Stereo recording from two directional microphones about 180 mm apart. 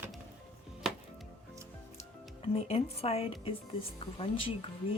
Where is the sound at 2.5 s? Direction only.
35° left (ahead or behind).